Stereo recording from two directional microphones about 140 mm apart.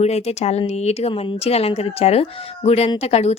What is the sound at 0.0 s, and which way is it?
Speech, 50° left (ahead or behind).